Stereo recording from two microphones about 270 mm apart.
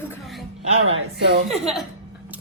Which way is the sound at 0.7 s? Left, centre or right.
Right.